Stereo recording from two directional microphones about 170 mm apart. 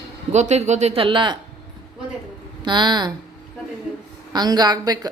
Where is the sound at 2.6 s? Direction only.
25° right (ahead or behind).